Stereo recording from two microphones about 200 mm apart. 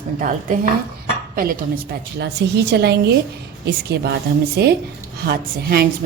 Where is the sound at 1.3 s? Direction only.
45° right (ahead or behind).